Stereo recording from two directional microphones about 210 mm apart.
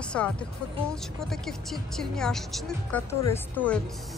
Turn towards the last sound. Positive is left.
turn(degrees=5)  # may be behind; listen again after turning